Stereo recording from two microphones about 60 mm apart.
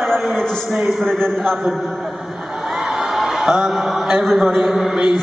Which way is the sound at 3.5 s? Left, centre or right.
Centre.